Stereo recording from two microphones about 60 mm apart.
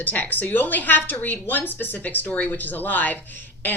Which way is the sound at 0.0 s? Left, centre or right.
Left.